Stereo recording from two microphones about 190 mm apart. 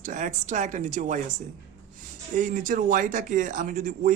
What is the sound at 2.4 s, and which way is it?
Speech, 45° right (ahead or behind).